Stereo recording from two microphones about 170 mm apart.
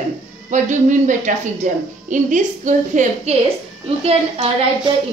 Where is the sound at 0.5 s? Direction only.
45° right (ahead or behind).